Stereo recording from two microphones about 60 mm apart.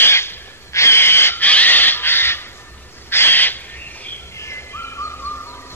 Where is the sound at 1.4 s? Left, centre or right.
Left.